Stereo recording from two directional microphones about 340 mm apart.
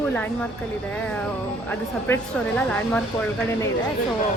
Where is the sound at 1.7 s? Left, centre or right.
Centre.